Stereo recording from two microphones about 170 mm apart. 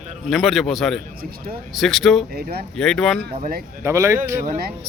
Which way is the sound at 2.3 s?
65° right (ahead or behind).